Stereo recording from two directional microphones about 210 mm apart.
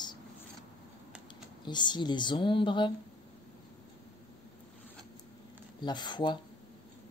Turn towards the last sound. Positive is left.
turn(degrees=20)  # may be behind; listen again after turning